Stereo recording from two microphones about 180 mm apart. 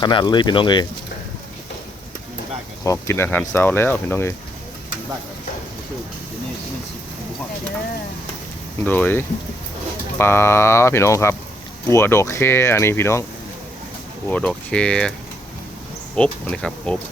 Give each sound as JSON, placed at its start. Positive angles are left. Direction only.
{"t": 0.0, "sound": "speech", "side_deg": 25}
{"t": 2.8, "sound": "speech", "side_deg": 15}
{"t": 8.8, "sound": "speech", "side_deg": 10}
{"t": 14.3, "sound": "speech", "side_deg": 5}
{"t": 16.1, "sound": "speech", "side_deg": 5}